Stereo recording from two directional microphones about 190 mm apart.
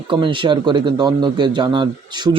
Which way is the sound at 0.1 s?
25° right (ahead or behind).